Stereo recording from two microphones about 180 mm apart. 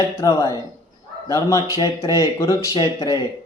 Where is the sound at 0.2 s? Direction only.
20° left (ahead or behind).